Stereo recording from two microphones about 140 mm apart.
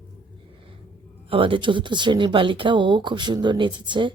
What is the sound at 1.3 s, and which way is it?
Speech, 40° right (ahead or behind).